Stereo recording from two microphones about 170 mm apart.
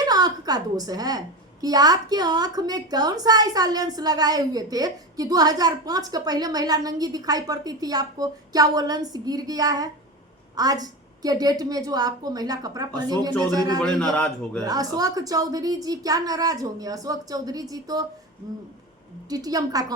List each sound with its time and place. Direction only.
0.1 s a woman's voice: 20° right (ahead or behind)
13.8 s speech: 5° left (ahead or behind)
14.6 s a woman's voice: 20° right (ahead or behind)
19.3 s a woman's voice: 20° right (ahead or behind)